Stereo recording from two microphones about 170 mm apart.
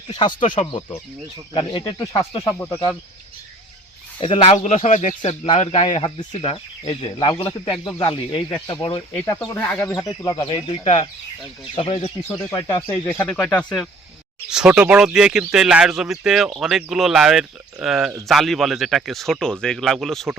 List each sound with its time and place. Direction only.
0.1 s speech: 25° left (ahead or behind)
0.3 s speech: 50° left (ahead or behind)
0.7 s speech: 30° left (ahead or behind)
4.2 s speech: 35° left (ahead or behind)
5.9 s speech: 30° left (ahead or behind)
9.4 s speech: 10° left (ahead or behind)
10.2 s speech: 25° left (ahead or behind)
12.5 s speech: 20° left (ahead or behind)
13.1 s speech: 5° left (ahead or behind)
14.5 s speech: 5° right (ahead or behind)